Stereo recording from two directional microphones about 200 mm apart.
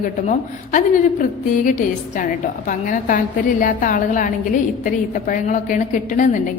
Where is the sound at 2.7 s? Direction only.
40° left (ahead or behind).